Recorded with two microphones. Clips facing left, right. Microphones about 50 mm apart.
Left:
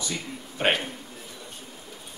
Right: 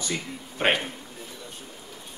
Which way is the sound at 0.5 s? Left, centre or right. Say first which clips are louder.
Right 1 dB; centre.